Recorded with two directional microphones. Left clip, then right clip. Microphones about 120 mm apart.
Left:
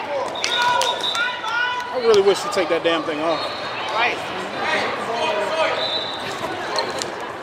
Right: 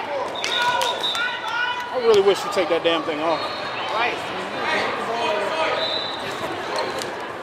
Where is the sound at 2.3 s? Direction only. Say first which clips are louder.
Left 1 dB; 25° left (ahead or behind).